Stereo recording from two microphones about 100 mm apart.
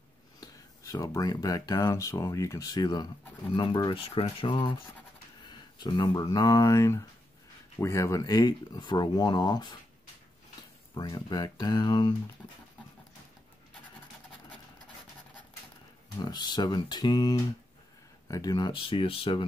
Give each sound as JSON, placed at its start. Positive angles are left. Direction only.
{"t": 0.4, "sound": "speech", "side_deg": 40}
{"t": 3.9, "sound": "speech", "side_deg": 65}
{"t": 11.0, "sound": "speech", "side_deg": 45}
{"t": 16.2, "sound": "speech", "side_deg": 45}
{"t": 18.8, "sound": "speech", "side_deg": 60}